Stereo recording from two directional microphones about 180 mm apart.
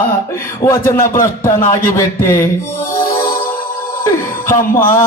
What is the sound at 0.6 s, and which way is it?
A man's voice, 15° left (ahead or behind).